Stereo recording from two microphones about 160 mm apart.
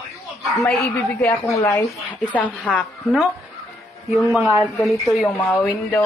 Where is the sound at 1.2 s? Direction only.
20° left (ahead or behind).